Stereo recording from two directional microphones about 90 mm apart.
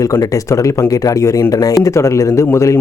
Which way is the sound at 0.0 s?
40° left (ahead or behind).